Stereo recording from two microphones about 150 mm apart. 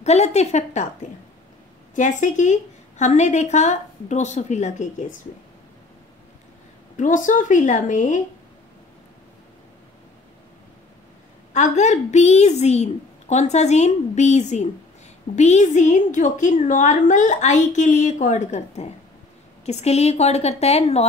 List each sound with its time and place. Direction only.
0.0 s a woman's voice: 45° left (ahead or behind)
2.0 s a woman's voice: 55° left (ahead or behind)
7.0 s a woman's voice: 60° left (ahead or behind)
11.5 s a woman's voice: 55° left (ahead or behind)